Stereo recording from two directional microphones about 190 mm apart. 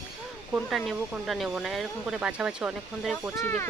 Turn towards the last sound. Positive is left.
turn(degrees=15)  # may be behind; listen again after turning